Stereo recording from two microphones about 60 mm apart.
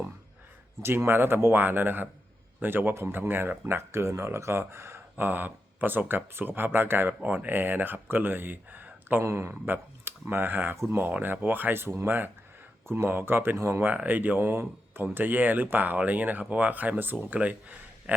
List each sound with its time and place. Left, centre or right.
0.8 s speech: right
7.1 s speech: right
9.2 s speech: right
9.6 s speech: right
10.8 s speech: right
11.0 s speech: right
13.8 s speech: right